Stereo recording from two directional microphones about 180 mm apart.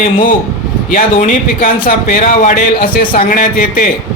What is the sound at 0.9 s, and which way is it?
Speech, 50° left (ahead or behind).